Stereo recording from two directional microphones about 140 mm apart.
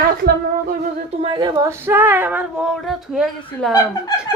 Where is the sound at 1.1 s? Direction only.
45° right (ahead or behind).